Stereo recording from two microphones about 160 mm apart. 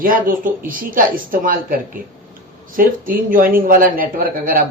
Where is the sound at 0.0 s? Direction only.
60° right (ahead or behind).